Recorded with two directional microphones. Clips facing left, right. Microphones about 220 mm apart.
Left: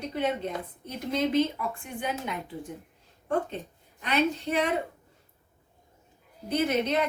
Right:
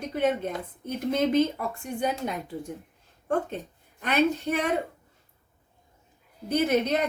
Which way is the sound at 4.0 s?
50° right (ahead or behind).